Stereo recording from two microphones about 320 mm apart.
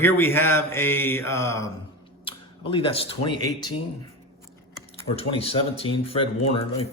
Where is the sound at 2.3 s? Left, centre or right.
Centre.